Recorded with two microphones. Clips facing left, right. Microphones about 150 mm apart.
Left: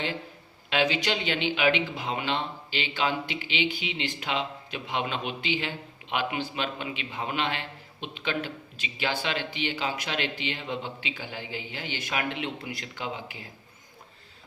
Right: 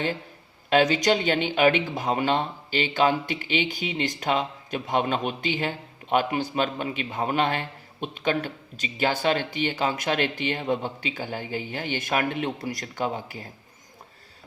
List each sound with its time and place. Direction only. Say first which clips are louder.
0.7 s speech: right 6 dB; 45° right (ahead or behind)